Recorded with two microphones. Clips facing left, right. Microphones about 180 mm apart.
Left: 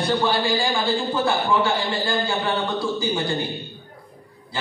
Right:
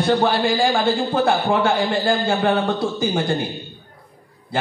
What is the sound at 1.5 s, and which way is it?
A woman's voice, 60° right (ahead or behind).